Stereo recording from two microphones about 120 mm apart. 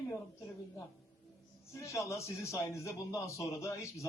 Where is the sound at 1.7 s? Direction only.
25° left (ahead or behind).